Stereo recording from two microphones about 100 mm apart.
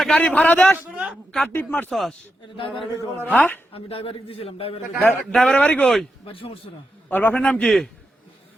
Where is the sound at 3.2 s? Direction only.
15° left (ahead or behind).